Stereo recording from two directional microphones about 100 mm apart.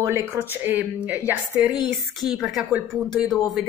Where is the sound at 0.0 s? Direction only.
25° right (ahead or behind).